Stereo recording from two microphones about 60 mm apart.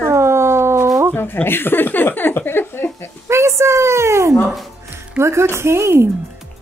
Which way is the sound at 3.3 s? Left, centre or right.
Right.